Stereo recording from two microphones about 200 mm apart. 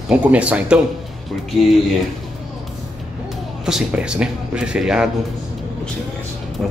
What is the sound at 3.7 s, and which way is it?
Speech, 5° right (ahead or behind).